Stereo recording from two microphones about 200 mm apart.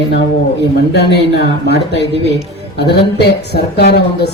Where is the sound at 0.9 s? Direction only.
55° left (ahead or behind).